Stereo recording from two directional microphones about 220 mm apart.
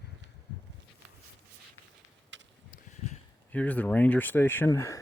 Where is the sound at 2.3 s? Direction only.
55° right (ahead or behind).